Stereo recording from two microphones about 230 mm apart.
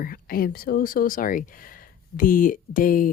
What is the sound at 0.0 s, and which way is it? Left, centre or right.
Speech, left.